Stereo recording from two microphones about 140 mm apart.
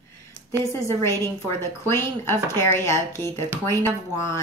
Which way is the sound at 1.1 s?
20° left (ahead or behind).